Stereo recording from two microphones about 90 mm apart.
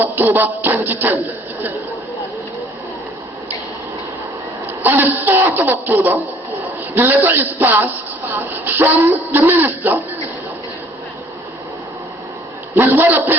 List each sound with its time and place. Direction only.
0.0 s speech: 20° right (ahead or behind)
4.8 s speech: 20° right (ahead or behind)
12.7 s speech: 25° right (ahead or behind)